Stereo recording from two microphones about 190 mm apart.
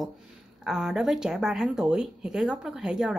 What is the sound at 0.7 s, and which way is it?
A woman's voice, 5° right (ahead or behind).